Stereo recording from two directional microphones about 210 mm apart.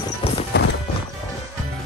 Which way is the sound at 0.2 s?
25° left (ahead or behind).